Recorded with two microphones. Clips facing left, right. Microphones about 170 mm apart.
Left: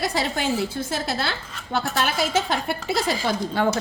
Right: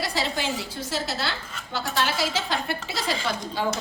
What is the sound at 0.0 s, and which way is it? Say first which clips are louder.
A woman's voice: left 3 dB; 50° left (ahead or behind).